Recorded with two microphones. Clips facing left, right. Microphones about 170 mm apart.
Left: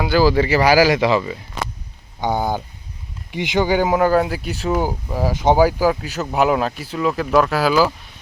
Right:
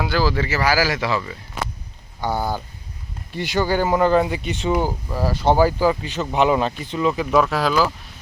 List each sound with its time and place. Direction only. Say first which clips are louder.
0.0 s speech: left 6 dB; 5° left (ahead or behind)
4.8 s speech: left 2 dB; 15° left (ahead or behind)